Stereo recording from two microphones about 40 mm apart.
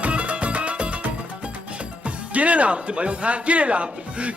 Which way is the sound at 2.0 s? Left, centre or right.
Right.